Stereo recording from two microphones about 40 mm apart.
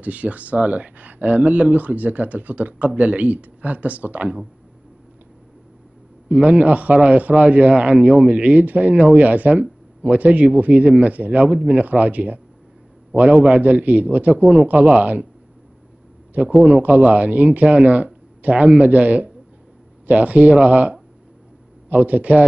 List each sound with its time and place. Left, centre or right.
0.0 s speech: right
6.3 s a man's voice: right
6.6 s speech: right
16.3 s a man's voice: right